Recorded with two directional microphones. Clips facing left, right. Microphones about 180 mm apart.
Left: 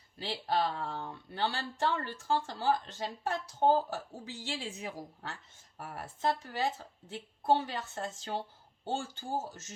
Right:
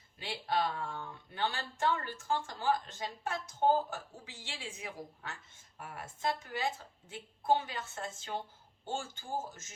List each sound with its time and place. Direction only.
0.2 s speech: 35° left (ahead or behind)